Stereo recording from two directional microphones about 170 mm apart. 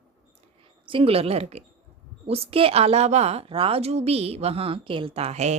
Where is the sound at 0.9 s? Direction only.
35° right (ahead or behind).